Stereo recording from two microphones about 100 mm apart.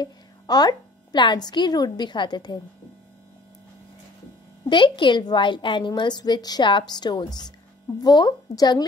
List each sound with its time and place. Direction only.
0.0 s a woman's voice: 40° left (ahead or behind)
4.6 s a woman's voice: 55° left (ahead or behind)